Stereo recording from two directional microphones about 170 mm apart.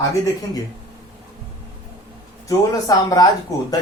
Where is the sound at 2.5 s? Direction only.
20° left (ahead or behind).